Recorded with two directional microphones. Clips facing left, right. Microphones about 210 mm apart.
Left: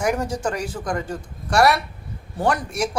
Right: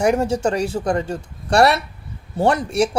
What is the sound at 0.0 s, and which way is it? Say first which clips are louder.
Speech: right 5 dB; 25° right (ahead or behind).